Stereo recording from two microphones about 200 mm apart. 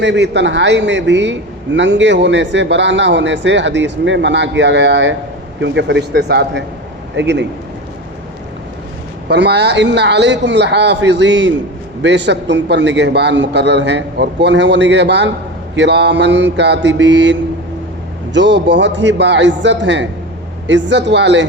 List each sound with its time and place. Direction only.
0.0 s a man's voice: 60° right (ahead or behind)
9.3 s a man's voice: 60° right (ahead or behind)
18.3 s a man's voice: 60° right (ahead or behind)